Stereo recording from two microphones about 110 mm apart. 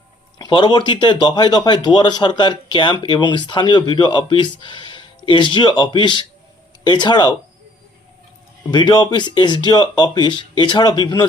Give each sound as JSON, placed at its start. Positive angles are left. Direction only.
{"t": 0.3, "sound": "speech", "side_deg": 45}
{"t": 8.7, "sound": "speech", "side_deg": 40}